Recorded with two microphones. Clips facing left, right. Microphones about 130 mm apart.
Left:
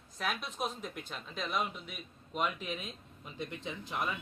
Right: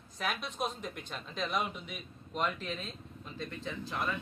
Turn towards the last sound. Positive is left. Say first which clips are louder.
# right 1 dB
turn(degrees=20)  # may be behind; listen again after turning